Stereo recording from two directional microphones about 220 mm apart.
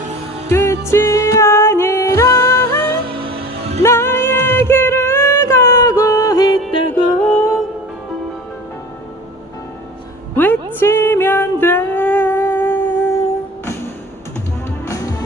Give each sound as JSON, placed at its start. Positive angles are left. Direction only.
{"t": 0.5, "sound": "music", "side_deg": 10}
{"t": 3.2, "sound": "music", "side_deg": -25}
{"t": 3.8, "sound": "music", "side_deg": 10}
{"t": 6.6, "sound": "music", "side_deg": 5}
{"t": 10.3, "sound": "music", "side_deg": 10}
{"t": 14.8, "sound": "music", "side_deg": 15}